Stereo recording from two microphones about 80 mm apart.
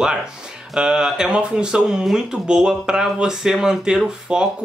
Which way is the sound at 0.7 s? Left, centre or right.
Centre.